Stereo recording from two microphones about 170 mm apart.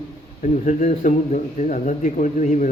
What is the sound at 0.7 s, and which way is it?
A man's voice, 45° left (ahead or behind).